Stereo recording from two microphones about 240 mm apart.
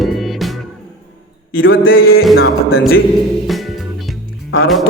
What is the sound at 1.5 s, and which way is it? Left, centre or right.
Music, left.